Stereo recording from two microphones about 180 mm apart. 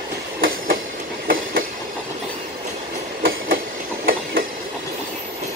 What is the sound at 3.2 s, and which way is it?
Train, 55° right (ahead or behind).